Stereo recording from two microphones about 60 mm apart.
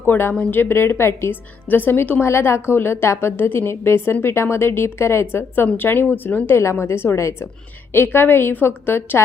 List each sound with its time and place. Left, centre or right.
0.0 s a woman's voice: left
1.7 s a woman's voice: left
2.2 s a woman's voice: left
6.6 s a woman's voice: left
7.9 s a woman's voice: left